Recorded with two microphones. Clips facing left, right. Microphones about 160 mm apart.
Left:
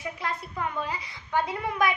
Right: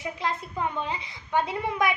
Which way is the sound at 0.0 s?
25° right (ahead or behind).